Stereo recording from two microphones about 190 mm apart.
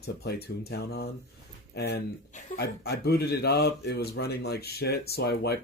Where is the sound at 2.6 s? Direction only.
55° left (ahead or behind).